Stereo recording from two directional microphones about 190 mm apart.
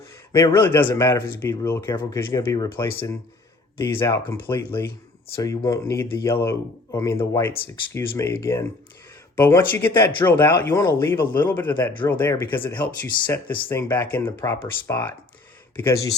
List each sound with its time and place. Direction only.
0.3 s speech: 15° left (ahead or behind)
13.1 s speech: 25° left (ahead or behind)
13.7 s speech: 15° left (ahead or behind)